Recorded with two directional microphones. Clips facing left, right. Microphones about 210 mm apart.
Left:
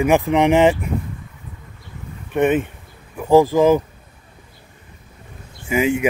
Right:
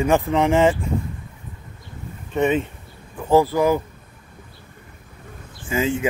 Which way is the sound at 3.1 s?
15° left (ahead or behind).